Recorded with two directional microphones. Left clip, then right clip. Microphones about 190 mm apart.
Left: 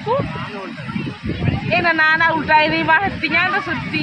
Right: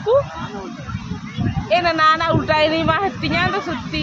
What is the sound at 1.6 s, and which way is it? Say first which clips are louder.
Speech: even; 60° right (ahead or behind).